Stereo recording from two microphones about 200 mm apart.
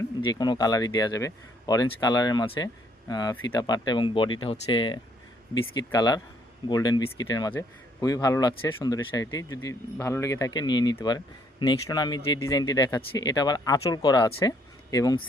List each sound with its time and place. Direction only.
0.3 s speech: 20° left (ahead or behind)